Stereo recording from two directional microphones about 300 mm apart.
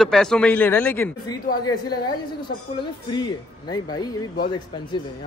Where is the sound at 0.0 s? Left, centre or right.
Centre.